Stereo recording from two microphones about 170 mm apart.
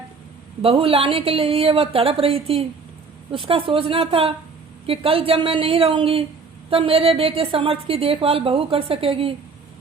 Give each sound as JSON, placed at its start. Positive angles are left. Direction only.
{"t": 0.6, "sound": "a woman's voice", "side_deg": -35}